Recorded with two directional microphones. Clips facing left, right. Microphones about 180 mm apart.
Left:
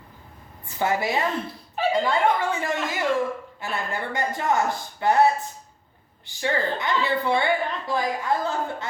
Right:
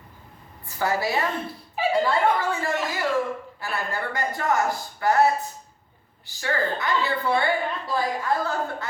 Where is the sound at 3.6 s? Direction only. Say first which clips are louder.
Even; 20° left (ahead or behind).